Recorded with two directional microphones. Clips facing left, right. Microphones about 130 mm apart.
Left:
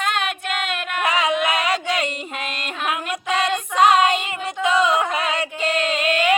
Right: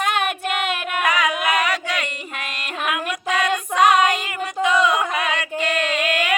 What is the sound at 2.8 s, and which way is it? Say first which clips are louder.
Music: right 1 dB; 30° left (ahead or behind).